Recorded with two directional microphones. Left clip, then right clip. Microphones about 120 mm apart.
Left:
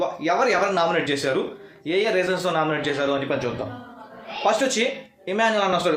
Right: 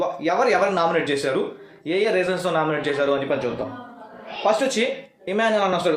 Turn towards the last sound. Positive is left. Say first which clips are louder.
# even
turn(degrees=10)  # may be behind; listen again after turning